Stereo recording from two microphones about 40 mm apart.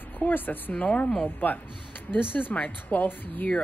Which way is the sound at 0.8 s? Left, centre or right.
Left.